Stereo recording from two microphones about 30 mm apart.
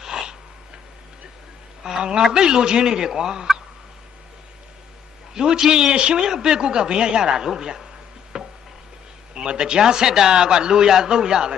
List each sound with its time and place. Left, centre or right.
0.0 s a sound: right
2.0 s a woman's voice: right
5.3 s a woman's voice: right
5.9 s a man's voice: right
6.2 s a woman's voice: right
8.3 s a sound: centre
9.3 s a woman's voice: right